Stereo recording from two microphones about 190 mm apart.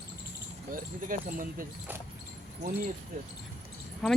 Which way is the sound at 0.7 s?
45° right (ahead or behind).